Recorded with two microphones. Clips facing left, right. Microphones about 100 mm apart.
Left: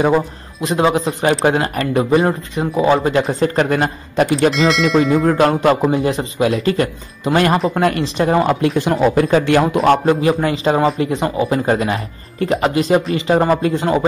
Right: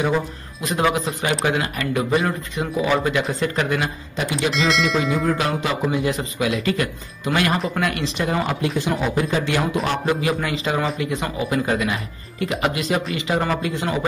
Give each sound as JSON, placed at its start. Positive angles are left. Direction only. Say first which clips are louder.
{"t": 0.6, "sound": "a man's voice", "louder": "left 5 dB", "side_deg": 25}
{"t": 1.2, "sound": "speech", "louder": "left 7 dB", "side_deg": 40}
{"t": 4.5, "sound": "speech", "louder": "left 6 dB", "side_deg": 0}
{"t": 5.2, "sound": "speech", "louder": "left 8 dB", "side_deg": 45}
{"t": 5.9, "sound": "speech", "louder": "left 5 dB", "side_deg": 35}
{"t": 10.0, "sound": "speech", "louder": "left 7 dB", "side_deg": 35}